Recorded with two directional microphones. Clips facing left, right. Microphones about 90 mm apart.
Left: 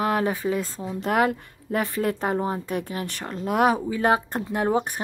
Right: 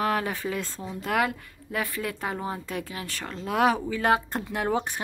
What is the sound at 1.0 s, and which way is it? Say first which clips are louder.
Speech: left 4 dB; 30° left (ahead or behind).